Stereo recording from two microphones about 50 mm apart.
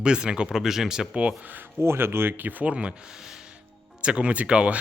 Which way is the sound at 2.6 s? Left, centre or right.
Right.